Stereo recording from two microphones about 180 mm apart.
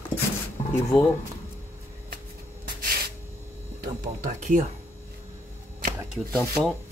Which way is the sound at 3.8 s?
50° right (ahead or behind).